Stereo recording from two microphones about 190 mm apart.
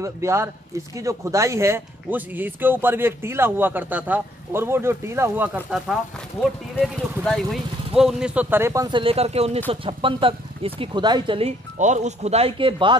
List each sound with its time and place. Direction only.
0.0 s speech: 15° right (ahead or behind)
6.8 s speech: centre (ahead or behind); by 12.9 s 25° right (ahead or behind)